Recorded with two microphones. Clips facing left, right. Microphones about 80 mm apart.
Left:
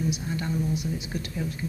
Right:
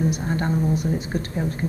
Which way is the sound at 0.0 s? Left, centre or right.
Right.